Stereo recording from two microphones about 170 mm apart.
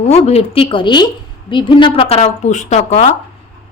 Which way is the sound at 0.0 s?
40° left (ahead or behind).